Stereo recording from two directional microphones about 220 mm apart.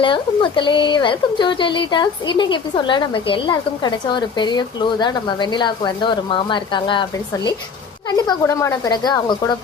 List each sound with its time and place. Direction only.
0.0 s speech: 20° left (ahead or behind)